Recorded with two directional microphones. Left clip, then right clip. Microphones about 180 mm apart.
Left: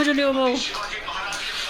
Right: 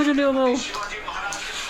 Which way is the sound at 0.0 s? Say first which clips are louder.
Even; 15° right (ahead or behind).